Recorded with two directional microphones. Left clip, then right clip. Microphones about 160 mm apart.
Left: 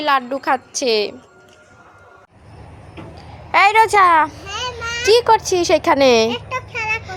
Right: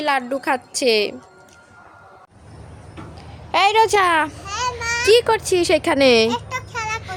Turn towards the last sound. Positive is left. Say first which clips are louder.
# left 2 dB
turn(degrees=-15)  # may be behind; listen again after turning